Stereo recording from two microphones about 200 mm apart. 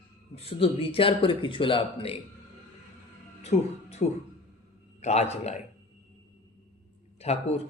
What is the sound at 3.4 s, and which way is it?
Speech, 35° left (ahead or behind).